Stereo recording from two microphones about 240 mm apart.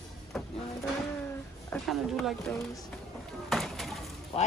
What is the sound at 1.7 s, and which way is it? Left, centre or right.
Speech, centre.